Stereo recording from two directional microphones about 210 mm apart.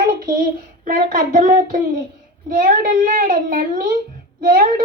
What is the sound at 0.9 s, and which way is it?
Speech, 40° right (ahead or behind).